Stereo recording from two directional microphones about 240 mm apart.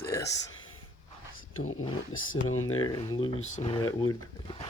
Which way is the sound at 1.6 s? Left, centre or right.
Left.